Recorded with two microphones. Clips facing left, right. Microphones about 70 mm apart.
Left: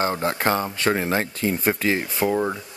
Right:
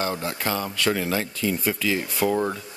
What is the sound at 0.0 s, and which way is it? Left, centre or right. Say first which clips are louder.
Speech: left 5 dB; left.